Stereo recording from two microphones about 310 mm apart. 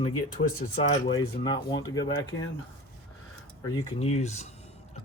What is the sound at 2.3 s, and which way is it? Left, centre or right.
Speech, left.